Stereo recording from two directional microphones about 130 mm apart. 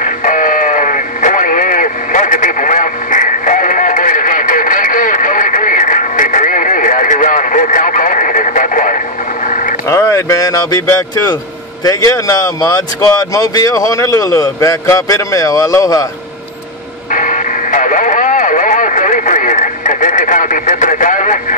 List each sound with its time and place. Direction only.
0.0 s radio: 90° left
9.8 s speech: 20° left (ahead or behind)
17.1 s radio: 80° left